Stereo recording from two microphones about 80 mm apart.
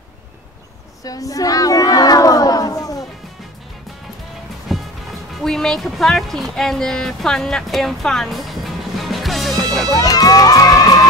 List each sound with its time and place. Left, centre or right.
1.0 s a sound: left
4.7 s music: centre
5.4 s speech: centre
9.9 s music: left